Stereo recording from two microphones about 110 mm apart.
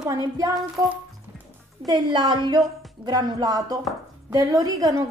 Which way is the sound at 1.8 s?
40° right (ahead or behind).